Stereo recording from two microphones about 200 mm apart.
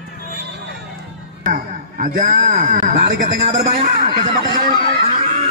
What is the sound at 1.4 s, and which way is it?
A man's voice, 40° right (ahead or behind).